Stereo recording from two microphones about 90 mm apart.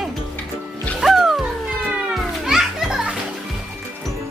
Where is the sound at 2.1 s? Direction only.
5° right (ahead or behind).